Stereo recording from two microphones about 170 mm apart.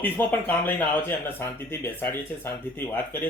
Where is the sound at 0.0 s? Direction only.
10° left (ahead or behind).